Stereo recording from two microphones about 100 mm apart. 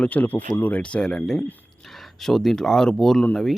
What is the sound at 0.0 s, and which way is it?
Speech, 15° left (ahead or behind).